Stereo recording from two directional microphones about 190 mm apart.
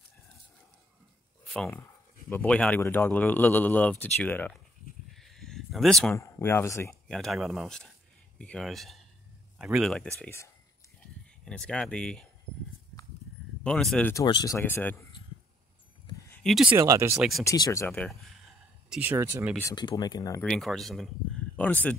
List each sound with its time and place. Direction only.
1.7 s speech: 10° left (ahead or behind)
5.1 s a sound: centre (ahead or behind)
6.1 s speech: 15° left (ahead or behind)
6.9 s speech: centre (ahead or behind)
10.2 s speech: 15° left (ahead or behind)
13.7 s speech: 5° left (ahead or behind)
14.1 s speech: 20° left (ahead or behind)
16.7 s speech: 15° right (ahead or behind)
17.5 s speech: 15° left (ahead or behind)
18.9 s speech: 10° right (ahead or behind)
19.7 s speech: 25° left (ahead or behind)
20.4 s speech: centre (ahead or behind)